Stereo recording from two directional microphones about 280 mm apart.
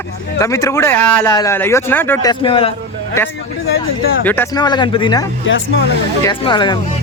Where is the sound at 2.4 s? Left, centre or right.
Centre.